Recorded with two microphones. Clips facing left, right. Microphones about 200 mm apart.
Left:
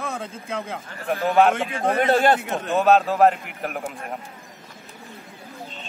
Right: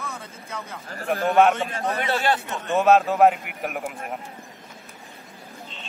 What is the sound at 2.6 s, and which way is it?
A man's voice, centre (ahead or behind).